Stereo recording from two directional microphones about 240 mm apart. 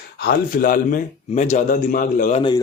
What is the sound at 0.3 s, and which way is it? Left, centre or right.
A man's voice, left.